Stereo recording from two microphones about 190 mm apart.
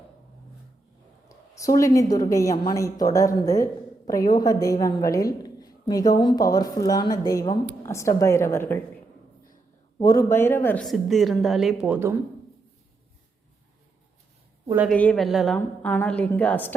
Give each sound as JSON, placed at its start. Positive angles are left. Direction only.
{"t": 1.3, "sound": "a woman's voice", "side_deg": 15}
{"t": 10.0, "sound": "a woman's voice", "side_deg": 15}
{"t": 10.8, "sound": "a woman's voice", "side_deg": 0}
{"t": 14.8, "sound": "a woman's voice", "side_deg": 5}